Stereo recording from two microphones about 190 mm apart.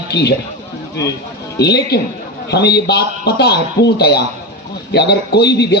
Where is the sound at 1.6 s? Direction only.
60° left (ahead or behind).